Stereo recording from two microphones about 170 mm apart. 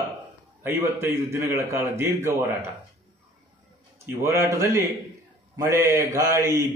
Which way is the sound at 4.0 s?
15° right (ahead or behind).